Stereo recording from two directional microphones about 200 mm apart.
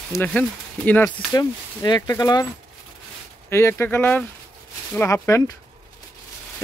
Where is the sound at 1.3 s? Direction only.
20° left (ahead or behind).